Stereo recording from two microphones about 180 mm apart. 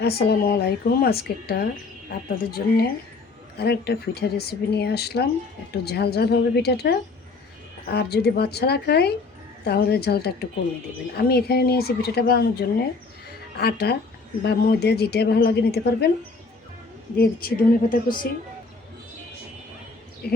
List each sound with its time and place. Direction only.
0.0 s a woman's voice: 60° left (ahead or behind)
17.2 s a woman's voice: 55° left (ahead or behind)
20.2 s a woman's voice: 65° left (ahead or behind)